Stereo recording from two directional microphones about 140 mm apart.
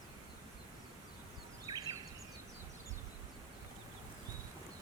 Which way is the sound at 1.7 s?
30° right (ahead or behind).